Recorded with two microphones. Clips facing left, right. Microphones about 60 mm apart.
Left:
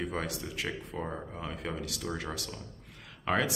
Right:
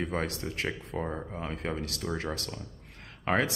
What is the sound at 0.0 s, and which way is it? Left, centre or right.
Speech, right.